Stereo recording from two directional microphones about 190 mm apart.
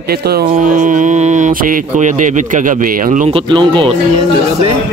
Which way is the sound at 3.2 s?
25° right (ahead or behind).